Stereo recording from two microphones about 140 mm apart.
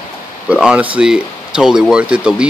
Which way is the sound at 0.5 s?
5° right (ahead or behind).